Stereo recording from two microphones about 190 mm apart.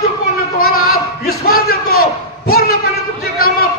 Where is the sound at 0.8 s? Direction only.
55° left (ahead or behind).